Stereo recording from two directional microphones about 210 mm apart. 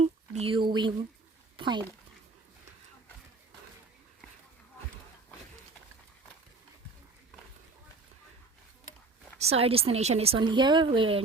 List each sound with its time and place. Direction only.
0.0 s a sound: 30° right (ahead or behind)
1.5 s speech: 20° right (ahead or behind)
9.4 s speech: 30° right (ahead or behind)